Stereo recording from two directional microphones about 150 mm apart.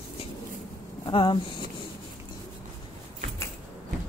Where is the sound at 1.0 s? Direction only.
30° left (ahead or behind).